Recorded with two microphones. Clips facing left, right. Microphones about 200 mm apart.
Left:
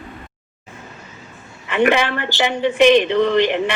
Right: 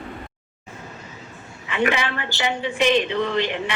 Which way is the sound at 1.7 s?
65° left (ahead or behind).